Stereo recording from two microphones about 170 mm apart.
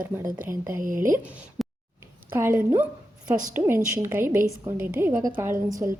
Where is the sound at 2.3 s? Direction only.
15° right (ahead or behind).